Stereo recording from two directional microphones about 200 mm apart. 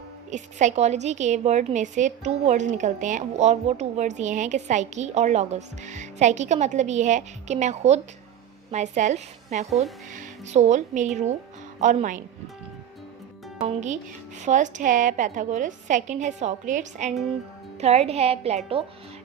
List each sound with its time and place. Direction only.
0.3 s a woman's voice: 35° right (ahead or behind)
13.8 s a woman's voice: 35° right (ahead or behind)